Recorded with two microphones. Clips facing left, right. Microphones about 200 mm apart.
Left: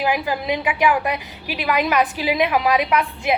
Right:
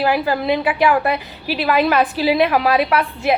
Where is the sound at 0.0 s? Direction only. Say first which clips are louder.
Right 4 dB; 15° left (ahead or behind).